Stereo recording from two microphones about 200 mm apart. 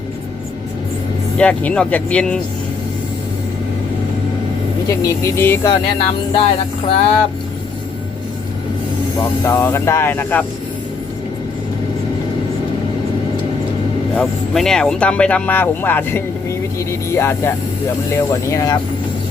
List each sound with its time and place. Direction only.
1.4 s speech: 5° left (ahead or behind)
4.9 s speech: 15° left (ahead or behind)
6.0 s music: 30° left (ahead or behind)
9.4 s speech: 10° left (ahead or behind)
14.2 s speech: centre (ahead or behind)
16.7 s a sound: 15° left (ahead or behind)
18.5 s music: 20° left (ahead or behind)